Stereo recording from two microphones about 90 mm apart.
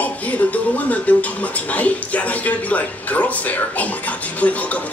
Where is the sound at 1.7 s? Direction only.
15° left (ahead or behind).